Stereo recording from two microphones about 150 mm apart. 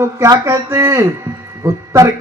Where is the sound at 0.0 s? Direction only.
20° right (ahead or behind).